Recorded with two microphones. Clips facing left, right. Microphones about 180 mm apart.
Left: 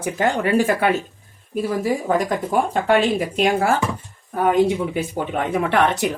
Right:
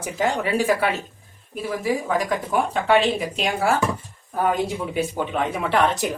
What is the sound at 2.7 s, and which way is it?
Speech, 50° left (ahead or behind).